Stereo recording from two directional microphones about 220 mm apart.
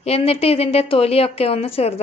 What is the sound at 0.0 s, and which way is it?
A woman's voice, 25° left (ahead or behind).